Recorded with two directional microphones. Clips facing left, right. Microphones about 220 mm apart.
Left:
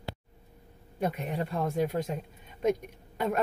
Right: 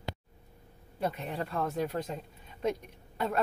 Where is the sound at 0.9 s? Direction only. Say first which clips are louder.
Left 2 dB; 15° left (ahead or behind).